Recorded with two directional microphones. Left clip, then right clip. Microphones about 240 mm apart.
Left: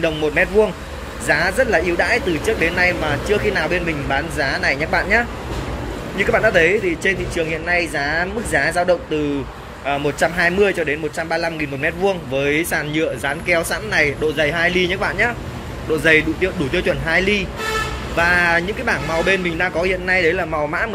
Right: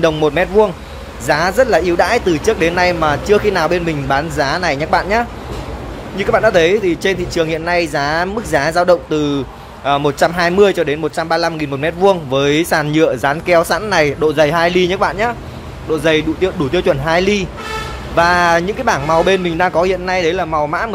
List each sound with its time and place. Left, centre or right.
0.0 s speech: centre